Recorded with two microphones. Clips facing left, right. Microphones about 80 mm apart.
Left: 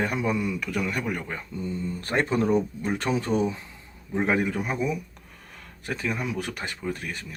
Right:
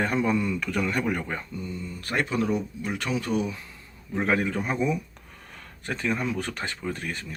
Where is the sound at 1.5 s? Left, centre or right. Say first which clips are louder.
Left 4 dB; left.